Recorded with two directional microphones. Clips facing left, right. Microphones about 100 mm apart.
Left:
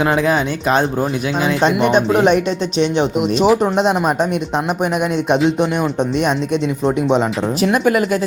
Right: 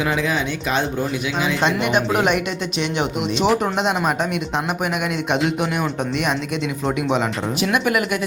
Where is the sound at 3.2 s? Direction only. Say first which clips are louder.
Left 5 dB; 45° left (ahead or behind).